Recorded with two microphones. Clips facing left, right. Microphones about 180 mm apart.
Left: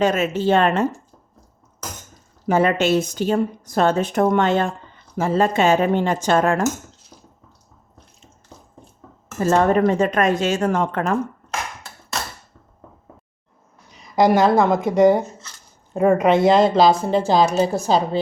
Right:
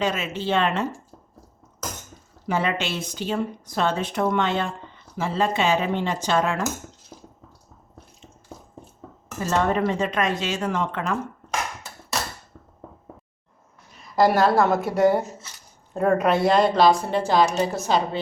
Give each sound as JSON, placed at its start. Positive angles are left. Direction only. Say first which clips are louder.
{"t": 0.0, "sound": "speech", "louder": "left 7 dB", "side_deg": 45}
{"t": 2.5, "sound": "speech", "louder": "left 8 dB", "side_deg": 45}
{"t": 9.4, "sound": "speech", "louder": "left 6 dB", "side_deg": 50}
{"t": 13.9, "sound": "a sound", "louder": "left 3 dB", "side_deg": 20}
{"t": 14.7, "sound": "speech", "louder": "left 4 dB", "side_deg": 15}